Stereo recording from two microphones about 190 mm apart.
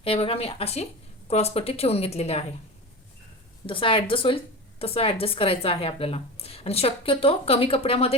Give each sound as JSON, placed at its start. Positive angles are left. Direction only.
{"t": 0.0, "sound": "a woman's voice", "side_deg": 30}
{"t": 3.7, "sound": "a woman's voice", "side_deg": 25}